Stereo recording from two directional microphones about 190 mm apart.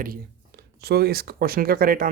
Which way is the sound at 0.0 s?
55° right (ahead or behind).